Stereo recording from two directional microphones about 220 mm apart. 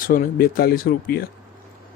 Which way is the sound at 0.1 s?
40° left (ahead or behind).